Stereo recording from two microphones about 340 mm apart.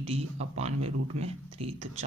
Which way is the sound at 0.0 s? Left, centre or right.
Centre.